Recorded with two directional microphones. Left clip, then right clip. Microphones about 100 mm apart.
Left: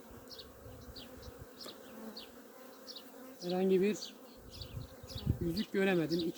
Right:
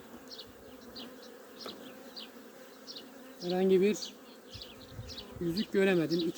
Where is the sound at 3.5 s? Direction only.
15° right (ahead or behind).